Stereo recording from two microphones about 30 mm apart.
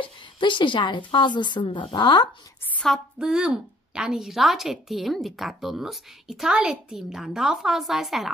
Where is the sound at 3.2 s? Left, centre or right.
Right.